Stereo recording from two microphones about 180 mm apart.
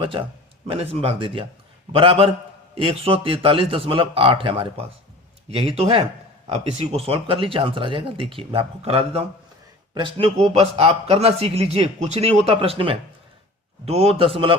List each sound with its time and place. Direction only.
0.7 s a man's voice: 30° right (ahead or behind)